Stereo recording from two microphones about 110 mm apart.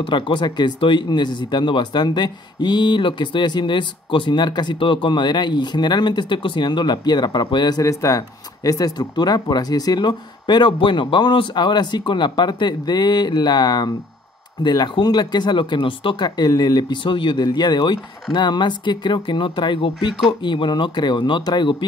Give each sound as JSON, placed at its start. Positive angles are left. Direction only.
{"t": 0.0, "sound": "speech", "side_deg": 50}
{"t": 7.8, "sound": "speech", "side_deg": 30}